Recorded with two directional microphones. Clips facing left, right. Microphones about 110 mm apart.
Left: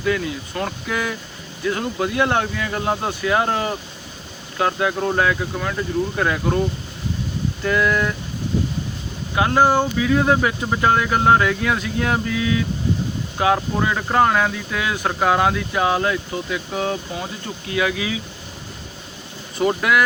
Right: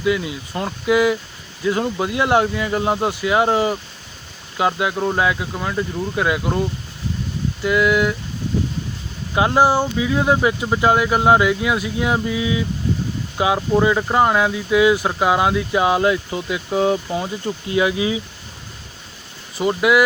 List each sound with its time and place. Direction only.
0.0 s speech: 15° right (ahead or behind)
7.6 s speech: 10° right (ahead or behind)
9.3 s speech: 20° right (ahead or behind)
9.6 s speech: 10° right (ahead or behind); by 18.2 s 25° right (ahead or behind)
19.5 s speech: 10° right (ahead or behind)